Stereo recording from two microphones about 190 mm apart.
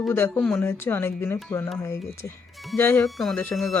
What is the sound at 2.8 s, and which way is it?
Speech, 10° left (ahead or behind).